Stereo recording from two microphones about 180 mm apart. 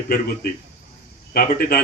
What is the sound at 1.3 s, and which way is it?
Speech, 55° left (ahead or behind).